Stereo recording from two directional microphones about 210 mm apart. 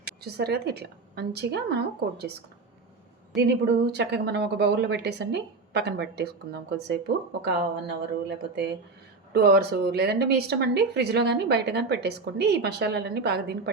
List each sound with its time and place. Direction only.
0.2 s speech: 50° right (ahead or behind)
3.3 s speech: 50° right (ahead or behind)